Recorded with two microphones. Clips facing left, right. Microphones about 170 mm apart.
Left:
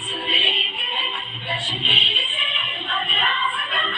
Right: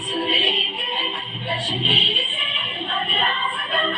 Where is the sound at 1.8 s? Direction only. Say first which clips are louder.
Right 5 dB; 35° right (ahead or behind).